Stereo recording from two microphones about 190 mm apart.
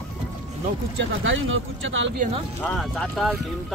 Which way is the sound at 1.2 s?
90° right.